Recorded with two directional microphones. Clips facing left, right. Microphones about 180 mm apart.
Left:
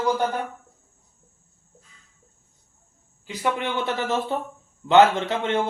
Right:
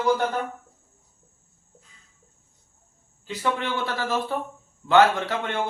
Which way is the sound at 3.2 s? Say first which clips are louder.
Left 1 dB; 15° left (ahead or behind).